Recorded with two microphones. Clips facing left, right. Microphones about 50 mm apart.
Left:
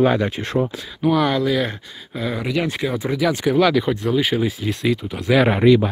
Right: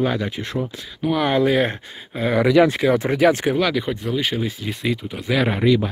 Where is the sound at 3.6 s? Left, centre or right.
Centre.